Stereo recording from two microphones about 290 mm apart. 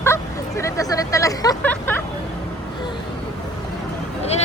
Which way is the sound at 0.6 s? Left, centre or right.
Centre.